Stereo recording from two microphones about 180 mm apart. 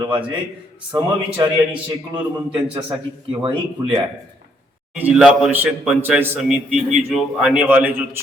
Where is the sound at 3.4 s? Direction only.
25° right (ahead or behind).